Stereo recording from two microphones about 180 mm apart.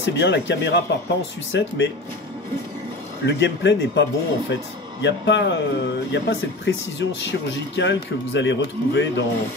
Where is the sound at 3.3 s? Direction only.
75° left (ahead or behind).